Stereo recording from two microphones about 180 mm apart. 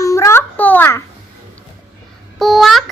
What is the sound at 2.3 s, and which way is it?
Speech, centre (ahead or behind).